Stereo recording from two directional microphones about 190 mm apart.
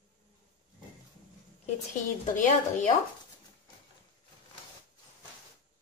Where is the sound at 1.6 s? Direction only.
40° left (ahead or behind).